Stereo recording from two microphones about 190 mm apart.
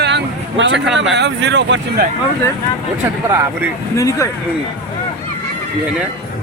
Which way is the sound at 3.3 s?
15° right (ahead or behind).